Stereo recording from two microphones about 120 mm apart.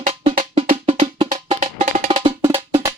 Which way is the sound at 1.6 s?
90° right.